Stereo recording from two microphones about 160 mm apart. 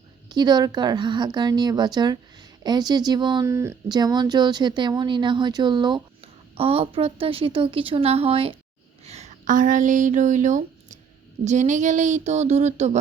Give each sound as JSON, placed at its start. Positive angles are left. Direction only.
{"t": 0.3, "sound": "speech", "side_deg": -25}
{"t": 3.4, "sound": "a woman's voice", "side_deg": -15}